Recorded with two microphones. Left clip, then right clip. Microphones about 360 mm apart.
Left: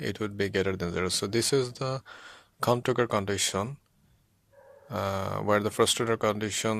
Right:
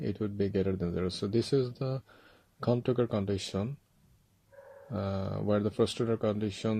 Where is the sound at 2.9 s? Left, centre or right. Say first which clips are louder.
Left 4 dB; centre.